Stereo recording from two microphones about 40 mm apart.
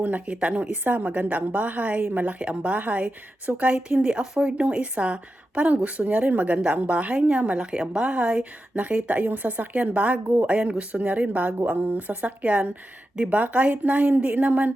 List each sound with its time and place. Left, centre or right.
0.0 s a woman's voice: right
0.7 s a woman's voice: right
2.4 s a woman's voice: right
4.0 s a woman's voice: right
8.7 s a woman's voice: right